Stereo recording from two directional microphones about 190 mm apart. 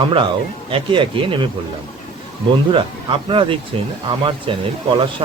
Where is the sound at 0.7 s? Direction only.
25° right (ahead or behind).